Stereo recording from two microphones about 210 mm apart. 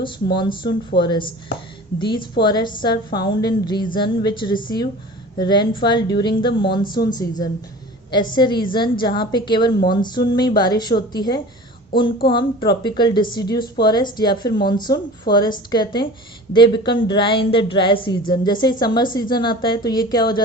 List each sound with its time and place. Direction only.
0.0 s a woman's voice: 20° left (ahead or behind)
6.8 s speech: 45° left (ahead or behind)
7.1 s a woman's voice: 20° left (ahead or behind)